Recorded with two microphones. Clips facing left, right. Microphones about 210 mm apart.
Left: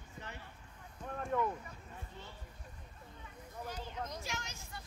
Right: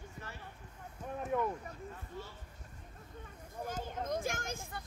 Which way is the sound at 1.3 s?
10° right (ahead or behind).